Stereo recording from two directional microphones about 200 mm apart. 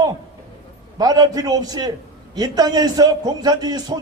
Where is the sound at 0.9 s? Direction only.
20° right (ahead or behind).